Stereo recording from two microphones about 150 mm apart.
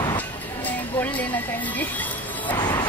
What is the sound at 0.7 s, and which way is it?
Music, 10° left (ahead or behind).